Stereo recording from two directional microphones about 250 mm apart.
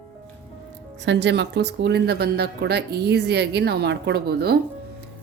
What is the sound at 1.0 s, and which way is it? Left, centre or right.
A woman's voice, right.